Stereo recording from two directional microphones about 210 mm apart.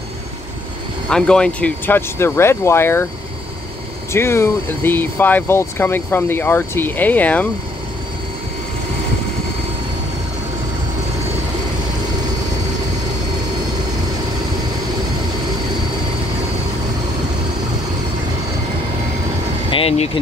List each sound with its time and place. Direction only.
1.1 s speech: 5° left (ahead or behind)
4.1 s speech: 10° left (ahead or behind)
19.7 s vehicle: 30° left (ahead or behind)